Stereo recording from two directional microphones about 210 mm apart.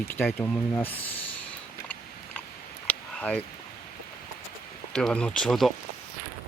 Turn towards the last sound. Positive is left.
turn(degrees=0)  # may be behind; listen again after turning